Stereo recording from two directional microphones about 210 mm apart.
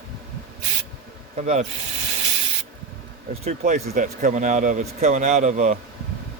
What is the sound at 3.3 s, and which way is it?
Speech, 30° right (ahead or behind).